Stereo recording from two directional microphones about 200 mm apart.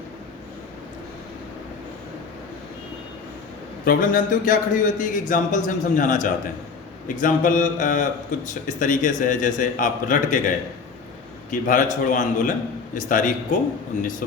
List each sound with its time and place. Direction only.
3.8 s a man's voice: 45° left (ahead or behind)
11.5 s a man's voice: 40° left (ahead or behind)